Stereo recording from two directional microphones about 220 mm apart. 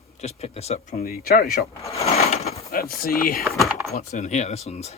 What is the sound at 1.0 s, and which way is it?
Speech, 45° left (ahead or behind).